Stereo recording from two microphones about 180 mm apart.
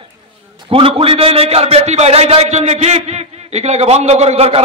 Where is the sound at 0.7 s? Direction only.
30° right (ahead or behind).